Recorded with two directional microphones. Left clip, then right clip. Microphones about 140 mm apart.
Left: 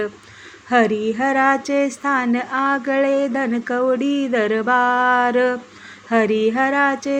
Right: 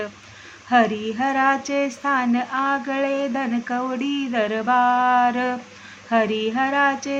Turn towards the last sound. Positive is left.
turn(degrees=35)  # may be behind; listen again after turning